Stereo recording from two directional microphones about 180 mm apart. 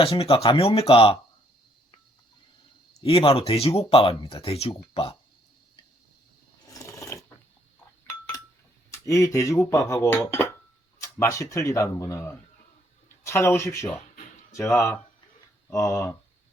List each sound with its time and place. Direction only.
0.0 s speech: 30° left (ahead or behind)
3.0 s speech: 30° left (ahead or behind)
6.7 s mechanisms: 15° left (ahead or behind)
8.9 s speech: 15° left (ahead or behind)